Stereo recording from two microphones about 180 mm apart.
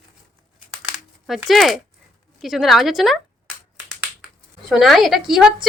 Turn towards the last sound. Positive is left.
turn(degrees=0)  # may be behind; listen again after turning